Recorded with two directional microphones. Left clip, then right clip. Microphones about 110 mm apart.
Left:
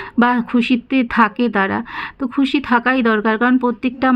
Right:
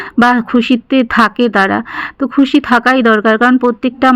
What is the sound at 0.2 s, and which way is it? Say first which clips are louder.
Speech: right 5 dB; 35° right (ahead or behind).